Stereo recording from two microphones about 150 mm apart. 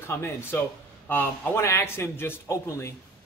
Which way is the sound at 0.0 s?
15° left (ahead or behind).